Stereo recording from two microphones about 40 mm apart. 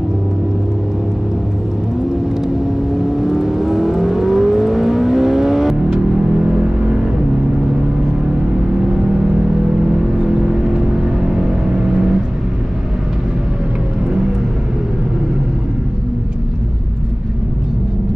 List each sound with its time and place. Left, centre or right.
3.1 s vehicle: centre
5.9 s vehicle: centre
9.8 s vehicle: centre